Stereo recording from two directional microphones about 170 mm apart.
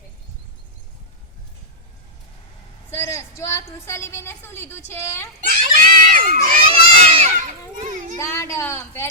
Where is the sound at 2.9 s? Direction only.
15° left (ahead or behind).